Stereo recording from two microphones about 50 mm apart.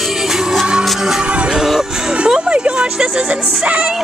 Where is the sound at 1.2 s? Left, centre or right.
Centre.